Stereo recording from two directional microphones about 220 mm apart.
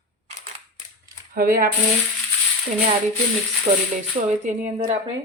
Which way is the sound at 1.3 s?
40° right (ahead or behind).